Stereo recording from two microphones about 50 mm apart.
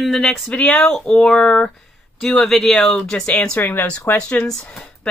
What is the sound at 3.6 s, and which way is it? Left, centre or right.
Speech, left.